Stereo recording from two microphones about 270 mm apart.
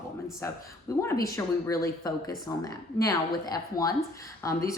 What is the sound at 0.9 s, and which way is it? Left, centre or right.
Speech, centre.